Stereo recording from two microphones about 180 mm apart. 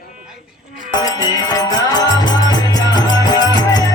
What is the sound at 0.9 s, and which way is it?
Music, 20° left (ahead or behind).